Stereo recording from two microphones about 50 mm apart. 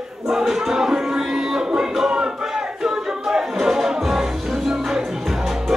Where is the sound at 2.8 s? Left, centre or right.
Centre.